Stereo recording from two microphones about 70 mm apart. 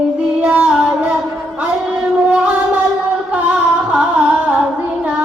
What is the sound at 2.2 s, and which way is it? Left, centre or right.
Singing, centre.